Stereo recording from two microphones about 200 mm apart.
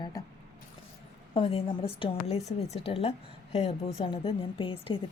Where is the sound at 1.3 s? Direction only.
30° left (ahead or behind).